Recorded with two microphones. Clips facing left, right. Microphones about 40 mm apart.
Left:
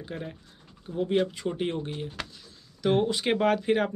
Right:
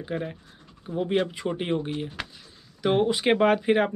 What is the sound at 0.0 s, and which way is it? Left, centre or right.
Speech, centre.